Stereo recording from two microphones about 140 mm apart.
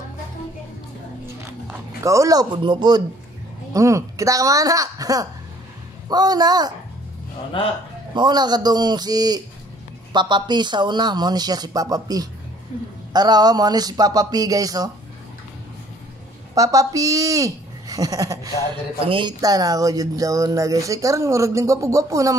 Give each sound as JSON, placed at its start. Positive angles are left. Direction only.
{"t": 2.0, "sound": "speech", "side_deg": -25}
{"t": 3.7, "sound": "speech", "side_deg": -20}
{"t": 8.1, "sound": "speech", "side_deg": -30}
{"t": 16.5, "sound": "speech", "side_deg": -25}
{"t": 19.0, "sound": "a woman's voice", "side_deg": -35}
{"t": 19.4, "sound": "speech", "side_deg": -25}